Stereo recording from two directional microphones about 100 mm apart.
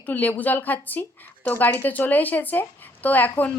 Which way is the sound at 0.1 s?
15° left (ahead or behind).